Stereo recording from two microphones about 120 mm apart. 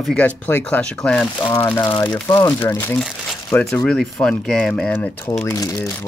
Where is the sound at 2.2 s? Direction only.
30° left (ahead or behind).